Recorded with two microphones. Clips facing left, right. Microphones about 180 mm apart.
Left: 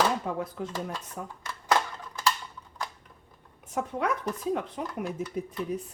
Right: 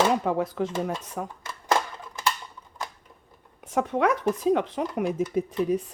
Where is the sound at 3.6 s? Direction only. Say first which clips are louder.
Right 6 dB; 90° right.